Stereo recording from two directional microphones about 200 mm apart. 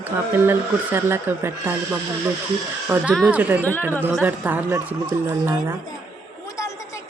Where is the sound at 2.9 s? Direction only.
5° right (ahead or behind).